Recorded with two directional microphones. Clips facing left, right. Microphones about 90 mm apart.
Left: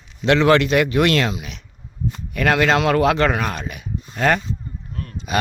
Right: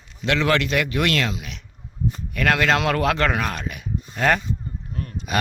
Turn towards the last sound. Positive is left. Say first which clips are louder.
# left 2 dB
turn(degrees=0)  # may be behind; listen again after turning